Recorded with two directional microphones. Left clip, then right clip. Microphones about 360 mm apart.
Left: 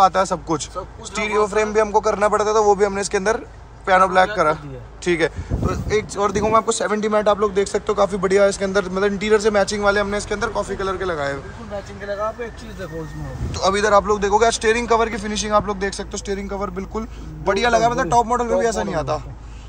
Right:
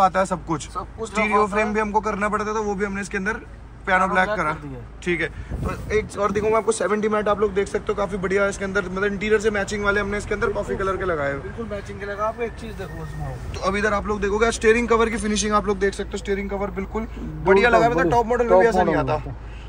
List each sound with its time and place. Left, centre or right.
0.0 s speech: centre
13.6 s speech: centre
18.2 s speech: left
18.6 s speech: centre